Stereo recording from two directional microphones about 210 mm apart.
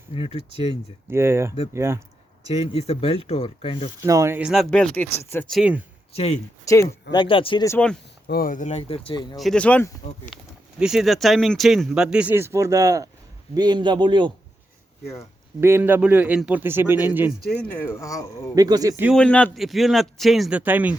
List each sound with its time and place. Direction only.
0.1 s speech: 30° left (ahead or behind)
1.1 s a man's voice: 10° right (ahead or behind)
2.5 s speech: 30° left (ahead or behind)
4.0 s speech: 15° right (ahead or behind)
6.1 s speech: 30° left (ahead or behind)
6.7 s speech: 15° left (ahead or behind)
8.3 s speech: 45° left (ahead or behind); by 9.4 s 25° left (ahead or behind)
9.4 s a man's voice: 5° left (ahead or behind); by 14.3 s 20° right (ahead or behind)
15.6 s a man's voice: 10° right (ahead or behind)
17.7 s speech: 10° left (ahead or behind)
18.5 s a man's voice: 15° right (ahead or behind)
19.1 s speech: 5° left (ahead or behind)